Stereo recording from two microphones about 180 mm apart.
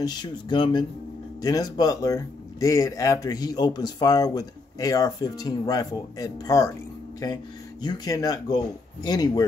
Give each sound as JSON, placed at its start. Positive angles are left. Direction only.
{"t": 0.0, "sound": "speech", "side_deg": 25}